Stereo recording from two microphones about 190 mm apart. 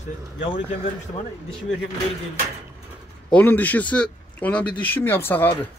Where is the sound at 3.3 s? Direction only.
10° left (ahead or behind).